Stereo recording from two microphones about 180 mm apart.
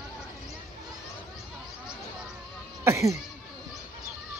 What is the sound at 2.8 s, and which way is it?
Speech, 15° right (ahead or behind).